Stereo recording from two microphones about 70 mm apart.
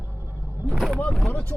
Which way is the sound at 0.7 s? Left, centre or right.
Centre.